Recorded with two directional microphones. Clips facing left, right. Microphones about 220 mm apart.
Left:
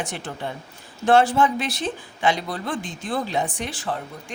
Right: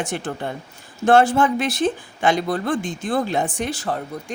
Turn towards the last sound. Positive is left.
turn(degrees=-40)  # may be behind; listen again after turning